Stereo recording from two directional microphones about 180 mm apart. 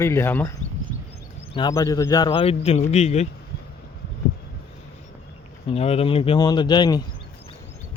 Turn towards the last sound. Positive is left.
turn(degrees=25)  # may be behind; listen again after turning